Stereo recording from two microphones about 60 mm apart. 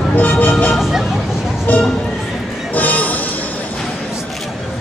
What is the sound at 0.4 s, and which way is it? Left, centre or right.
Speech, left.